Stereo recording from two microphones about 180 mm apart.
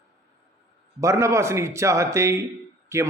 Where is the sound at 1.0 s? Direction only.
15° right (ahead or behind).